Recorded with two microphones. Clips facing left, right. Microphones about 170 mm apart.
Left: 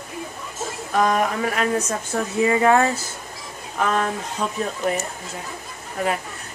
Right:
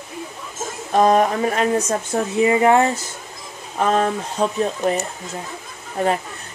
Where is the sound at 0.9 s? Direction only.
30° right (ahead or behind).